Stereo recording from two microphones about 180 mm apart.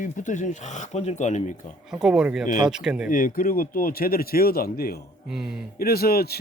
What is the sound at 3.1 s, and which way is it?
Speech, 50° left (ahead or behind).